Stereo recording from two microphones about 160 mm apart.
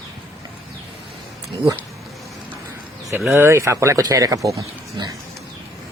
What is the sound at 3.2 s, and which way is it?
Speech, 10° right (ahead or behind).